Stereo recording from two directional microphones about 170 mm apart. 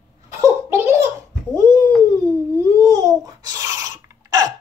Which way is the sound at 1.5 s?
20° right (ahead or behind).